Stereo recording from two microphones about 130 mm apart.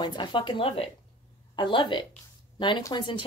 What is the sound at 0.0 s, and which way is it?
Speech, 35° left (ahead or behind).